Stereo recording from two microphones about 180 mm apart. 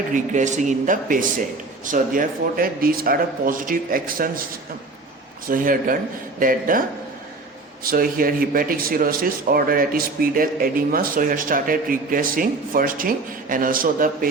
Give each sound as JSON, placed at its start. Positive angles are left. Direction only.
{"t": 0.1, "sound": "speech", "side_deg": -40}
{"t": 5.5, "sound": "speech", "side_deg": -50}
{"t": 7.9, "sound": "speech", "side_deg": -55}